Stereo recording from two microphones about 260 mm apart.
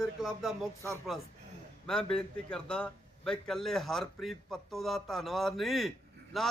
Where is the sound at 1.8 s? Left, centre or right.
Centre.